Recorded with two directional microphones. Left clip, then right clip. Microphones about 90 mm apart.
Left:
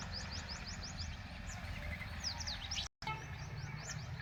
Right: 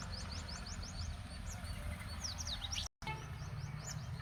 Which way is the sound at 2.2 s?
20° right (ahead or behind).